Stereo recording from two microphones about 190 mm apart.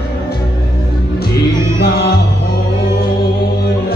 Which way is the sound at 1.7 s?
55° left (ahead or behind).